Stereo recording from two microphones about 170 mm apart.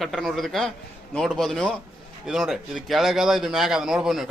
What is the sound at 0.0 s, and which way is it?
A man's voice, centre (ahead or behind).